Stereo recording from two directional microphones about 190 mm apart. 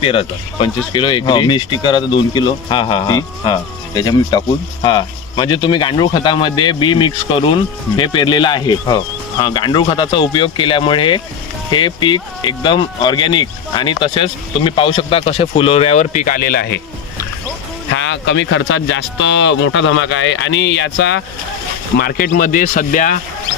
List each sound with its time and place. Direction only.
0.0 s speech: 30° left (ahead or behind); by 16.8 s 55° left (ahead or behind)
17.9 s speech: 80° left
21.9 s speech: 50° left (ahead or behind)